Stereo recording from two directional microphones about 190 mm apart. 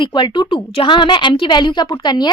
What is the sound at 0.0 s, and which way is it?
A woman's voice, 25° left (ahead or behind).